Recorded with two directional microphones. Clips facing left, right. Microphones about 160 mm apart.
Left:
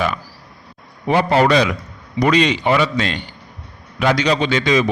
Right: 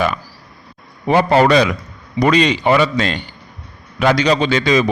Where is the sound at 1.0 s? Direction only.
40° right (ahead or behind).